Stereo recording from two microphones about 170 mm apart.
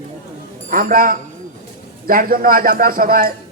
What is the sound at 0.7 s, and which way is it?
A man's voice, 55° right (ahead or behind).